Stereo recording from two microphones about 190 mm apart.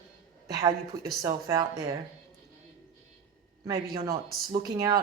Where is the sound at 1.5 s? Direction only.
20° right (ahead or behind).